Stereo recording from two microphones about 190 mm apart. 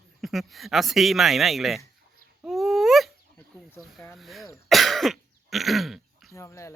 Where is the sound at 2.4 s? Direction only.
Centre (ahead or behind).